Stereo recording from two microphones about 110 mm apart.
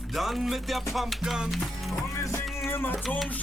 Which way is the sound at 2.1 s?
25° left (ahead or behind).